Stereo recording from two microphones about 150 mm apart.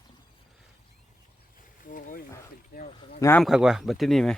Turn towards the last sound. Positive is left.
turn(degrees=0)  # may be behind; listen again after turning